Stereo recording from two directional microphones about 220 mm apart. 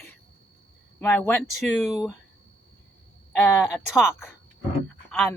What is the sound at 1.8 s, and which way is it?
Speech, centre (ahead or behind).